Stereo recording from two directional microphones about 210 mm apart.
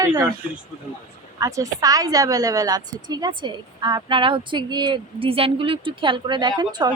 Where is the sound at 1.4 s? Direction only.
15° right (ahead or behind).